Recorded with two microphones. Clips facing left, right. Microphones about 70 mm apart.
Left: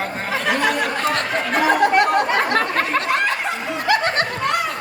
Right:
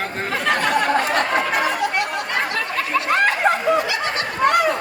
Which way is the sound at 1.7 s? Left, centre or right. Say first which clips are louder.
Left 7 dB; left.